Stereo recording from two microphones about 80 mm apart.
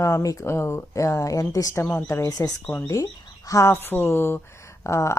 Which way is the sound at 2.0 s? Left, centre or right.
Left.